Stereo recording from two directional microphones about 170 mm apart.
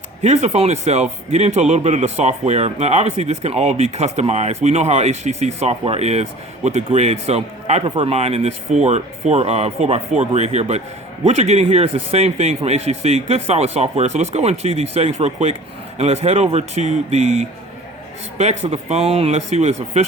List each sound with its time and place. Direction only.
0.2 s a man's voice: 40° right (ahead or behind)